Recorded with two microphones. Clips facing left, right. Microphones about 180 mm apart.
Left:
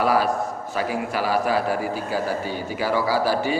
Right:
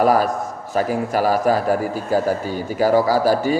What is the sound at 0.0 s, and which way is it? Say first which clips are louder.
A man's voice: right 4 dB; 45° right (ahead or behind).